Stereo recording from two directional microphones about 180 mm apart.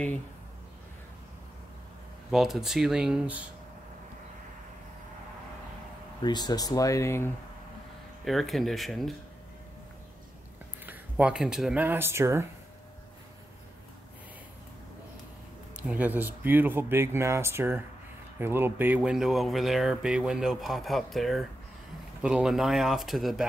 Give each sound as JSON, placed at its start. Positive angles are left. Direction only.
{"t": 2.3, "sound": "speech", "side_deg": 0}
{"t": 6.2, "sound": "speech", "side_deg": 25}
{"t": 8.3, "sound": "speech", "side_deg": 0}
{"t": 10.9, "sound": "speech", "side_deg": -5}
{"t": 15.7, "sound": "speech", "side_deg": -10}